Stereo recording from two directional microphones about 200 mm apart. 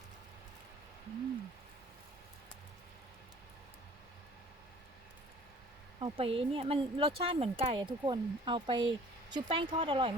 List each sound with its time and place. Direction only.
6.0 s speech: 30° right (ahead or behind)